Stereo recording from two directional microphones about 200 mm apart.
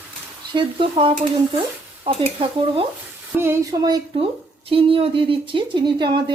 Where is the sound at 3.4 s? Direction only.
15° right (ahead or behind).